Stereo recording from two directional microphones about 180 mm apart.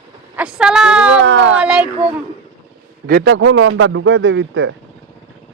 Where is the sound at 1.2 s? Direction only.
80° right.